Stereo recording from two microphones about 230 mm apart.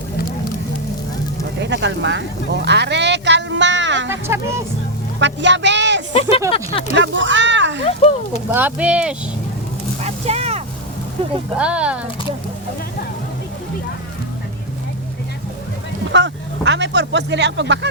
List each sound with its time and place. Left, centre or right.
1.6 s speech: right
2.6 s music: right
4.1 s speech: centre
5.2 s speech: right
6.5 s speech: left
6.9 s speech: right
7.9 s speech: left
8.4 s speech: centre
10.0 s a sound: right
11.5 s speech: centre
16.1 s speech: right